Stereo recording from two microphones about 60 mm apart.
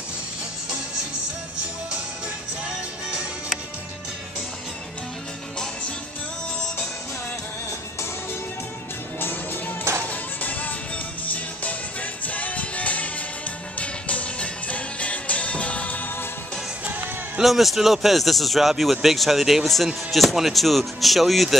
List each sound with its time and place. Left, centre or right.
3.1 s music: centre
10.0 s music: left
12.3 s music: left
17.4 s speech: centre